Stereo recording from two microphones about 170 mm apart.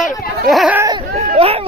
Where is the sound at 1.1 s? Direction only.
35° right (ahead or behind).